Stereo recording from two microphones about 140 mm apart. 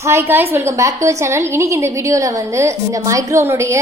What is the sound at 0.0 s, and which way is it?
A woman's voice, 20° right (ahead or behind).